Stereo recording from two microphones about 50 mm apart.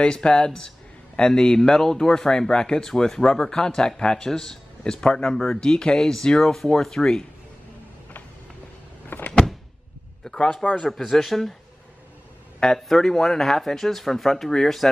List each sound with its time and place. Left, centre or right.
0.0 s a man's voice: centre
9.1 s power windows: left
10.2 s a man's voice: centre
10.8 s speech: centre
12.5 s a man's voice: centre